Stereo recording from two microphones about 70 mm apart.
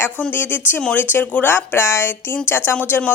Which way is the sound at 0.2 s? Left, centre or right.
Left.